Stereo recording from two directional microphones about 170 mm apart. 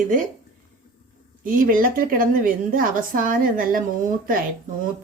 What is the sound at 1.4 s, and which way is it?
A woman's voice, 55° right (ahead or behind).